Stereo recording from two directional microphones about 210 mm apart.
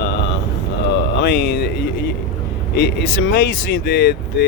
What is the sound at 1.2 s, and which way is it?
Speech, 50° left (ahead or behind).